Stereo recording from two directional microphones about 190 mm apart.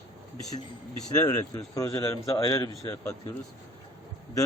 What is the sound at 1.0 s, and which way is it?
Speech, 20° left (ahead or behind).